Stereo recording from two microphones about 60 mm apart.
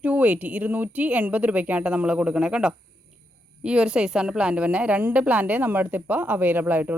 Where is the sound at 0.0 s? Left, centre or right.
Right.